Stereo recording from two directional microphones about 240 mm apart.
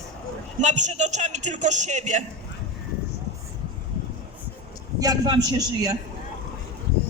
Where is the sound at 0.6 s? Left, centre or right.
Right.